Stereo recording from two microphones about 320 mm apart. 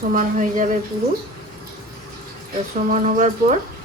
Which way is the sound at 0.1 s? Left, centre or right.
Right.